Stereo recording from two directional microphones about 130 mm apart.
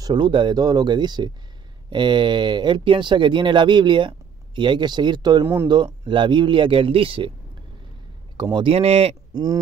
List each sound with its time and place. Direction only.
0.0 s speech: 35° right (ahead or behind)
5.4 s speech: 20° right (ahead or behind)
5.7 s speech: 35° right (ahead or behind)
8.5 s speech: 50° right (ahead or behind)